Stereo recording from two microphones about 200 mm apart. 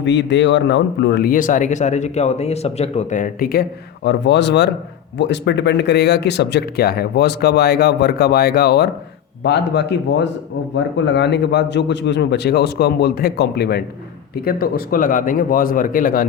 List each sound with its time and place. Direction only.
0.0 s a man's voice: 65° left (ahead or behind); by 16.2 s 45° left (ahead or behind)